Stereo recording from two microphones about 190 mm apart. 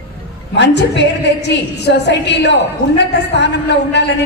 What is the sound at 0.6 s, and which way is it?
A woman's voice, 65° left (ahead or behind).